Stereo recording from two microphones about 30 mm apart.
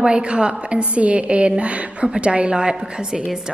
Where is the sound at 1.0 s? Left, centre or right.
Right.